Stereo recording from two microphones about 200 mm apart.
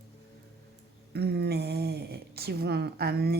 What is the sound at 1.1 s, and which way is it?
Speech, 55° right (ahead or behind).